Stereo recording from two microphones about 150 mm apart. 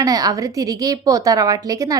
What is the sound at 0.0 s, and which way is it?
A woman's voice, 25° right (ahead or behind).